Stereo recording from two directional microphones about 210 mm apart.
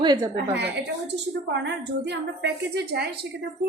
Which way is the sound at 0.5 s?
55° right (ahead or behind).